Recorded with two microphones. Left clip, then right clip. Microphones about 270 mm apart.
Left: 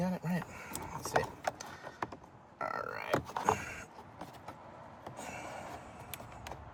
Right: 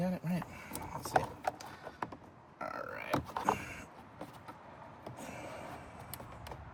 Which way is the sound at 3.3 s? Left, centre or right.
Centre.